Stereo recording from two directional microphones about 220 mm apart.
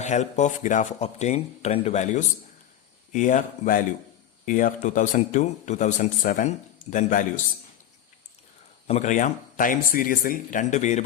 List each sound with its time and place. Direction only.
0.0 s speech: 30° left (ahead or behind)
8.9 s speech: 35° left (ahead or behind)